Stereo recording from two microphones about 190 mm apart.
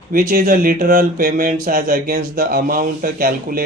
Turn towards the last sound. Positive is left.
turn(degrees=-50)  # may be behind; listen again after turning